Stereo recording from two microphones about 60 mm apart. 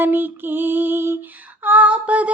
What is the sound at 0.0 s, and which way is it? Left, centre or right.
Female singing, right.